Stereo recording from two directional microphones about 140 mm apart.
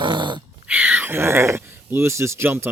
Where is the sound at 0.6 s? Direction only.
10° right (ahead or behind).